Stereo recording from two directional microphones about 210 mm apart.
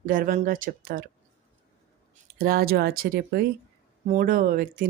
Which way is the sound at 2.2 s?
45° right (ahead or behind).